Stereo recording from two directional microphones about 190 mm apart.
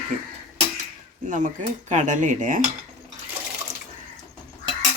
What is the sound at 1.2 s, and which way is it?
Speech, 40° right (ahead or behind).